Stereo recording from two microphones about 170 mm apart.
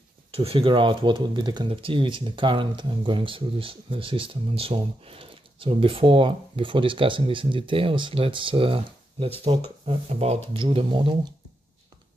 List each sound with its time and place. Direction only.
0.3 s speech: 35° right (ahead or behind)